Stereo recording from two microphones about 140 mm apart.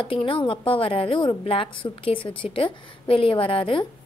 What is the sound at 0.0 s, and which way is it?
A woman's voice, 40° left (ahead or behind).